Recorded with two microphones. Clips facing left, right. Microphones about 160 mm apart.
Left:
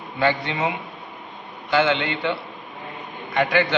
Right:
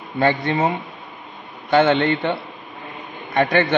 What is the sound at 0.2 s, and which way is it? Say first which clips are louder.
A man's voice: right 4 dB; 45° right (ahead or behind).